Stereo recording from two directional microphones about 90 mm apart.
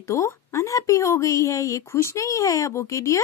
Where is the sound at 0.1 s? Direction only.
35° left (ahead or behind).